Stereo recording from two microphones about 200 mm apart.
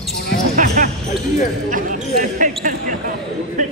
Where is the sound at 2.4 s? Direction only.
40° right (ahead or behind).